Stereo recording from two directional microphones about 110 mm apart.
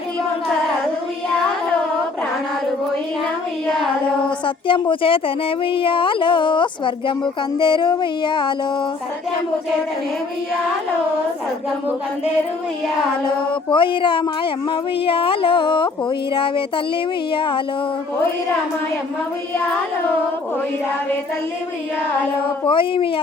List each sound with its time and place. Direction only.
4.4 s speech: 50° left (ahead or behind)
13.5 s speech: 50° left (ahead or behind)
22.6 s speech: 50° left (ahead or behind)